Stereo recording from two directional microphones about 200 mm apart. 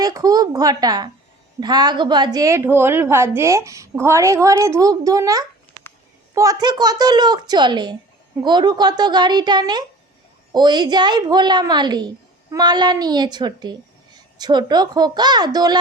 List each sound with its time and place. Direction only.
0.0 s a woman's voice: 20° right (ahead or behind)